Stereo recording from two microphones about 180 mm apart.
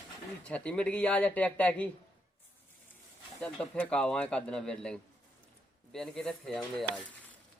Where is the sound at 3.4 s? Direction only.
5° left (ahead or behind).